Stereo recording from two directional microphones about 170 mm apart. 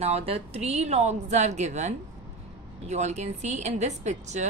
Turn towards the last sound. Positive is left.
turn(degrees=-45)  # may be behind; listen again after turning